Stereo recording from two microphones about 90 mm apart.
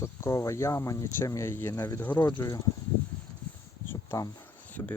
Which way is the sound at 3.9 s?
35° left (ahead or behind).